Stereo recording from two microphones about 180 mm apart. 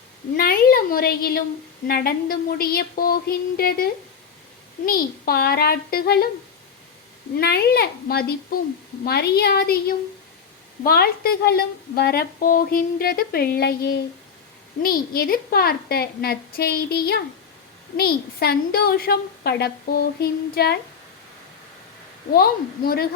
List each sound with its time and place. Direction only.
0.3 s a woman's voice: 55° left (ahead or behind)
4.9 s a woman's voice: 55° left (ahead or behind)
7.3 s a woman's voice: 60° left (ahead or behind)
22.3 s a woman's voice: 55° left (ahead or behind)